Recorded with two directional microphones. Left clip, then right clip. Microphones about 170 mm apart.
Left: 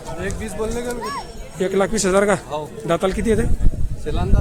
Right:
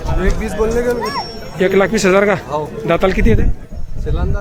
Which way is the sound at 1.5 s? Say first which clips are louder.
Right 6 dB; 35° left (ahead or behind).